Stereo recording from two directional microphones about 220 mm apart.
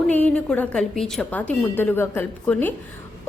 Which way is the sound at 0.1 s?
5° left (ahead or behind).